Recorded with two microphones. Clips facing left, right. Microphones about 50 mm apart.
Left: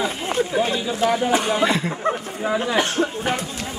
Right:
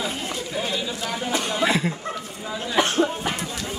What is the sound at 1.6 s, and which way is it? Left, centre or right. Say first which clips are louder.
Speech: left 2 dB; centre.